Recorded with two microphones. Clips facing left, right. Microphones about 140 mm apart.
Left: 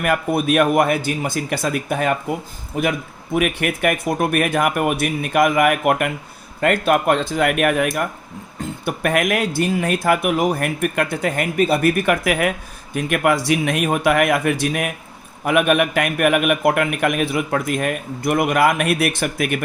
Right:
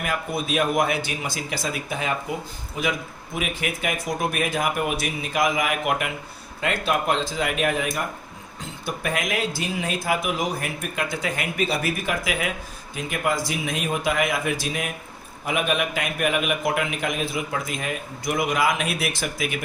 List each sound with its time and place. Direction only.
0.0 s a man's voice: 60° left (ahead or behind)
3.3 s speech: 60° left (ahead or behind)